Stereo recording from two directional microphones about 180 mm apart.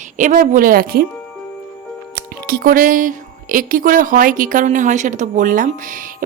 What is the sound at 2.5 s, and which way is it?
A woman's voice, 55° right (ahead or behind).